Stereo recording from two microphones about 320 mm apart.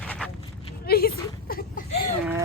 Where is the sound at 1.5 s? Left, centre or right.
Left.